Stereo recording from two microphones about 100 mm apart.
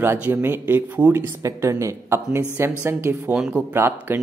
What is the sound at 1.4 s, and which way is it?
Speech, 30° right (ahead or behind).